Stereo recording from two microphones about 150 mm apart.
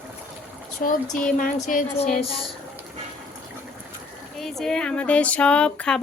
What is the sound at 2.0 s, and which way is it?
Speech, 40° left (ahead or behind).